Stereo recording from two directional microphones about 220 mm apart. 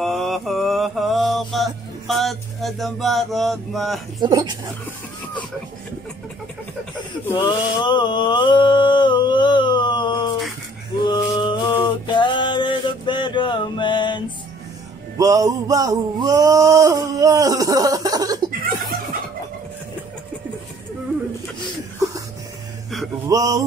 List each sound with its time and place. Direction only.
0.0 s mantra: centre (ahead or behind)
4.2 s speech: 20° right (ahead or behind)
7.3 s a sound: 20° left (ahead or behind)
11.1 s music: 20° left (ahead or behind)
15.1 s music: 15° right (ahead or behind)
23.2 s a sound: 15° right (ahead or behind)